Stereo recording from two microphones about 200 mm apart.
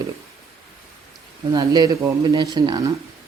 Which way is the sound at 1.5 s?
20° right (ahead or behind).